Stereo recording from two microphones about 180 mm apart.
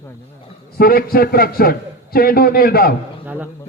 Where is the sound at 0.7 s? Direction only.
55° left (ahead or behind).